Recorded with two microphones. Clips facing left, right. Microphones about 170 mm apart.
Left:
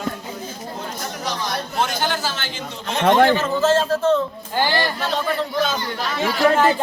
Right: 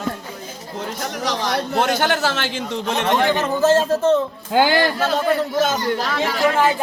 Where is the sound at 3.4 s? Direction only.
15° right (ahead or behind).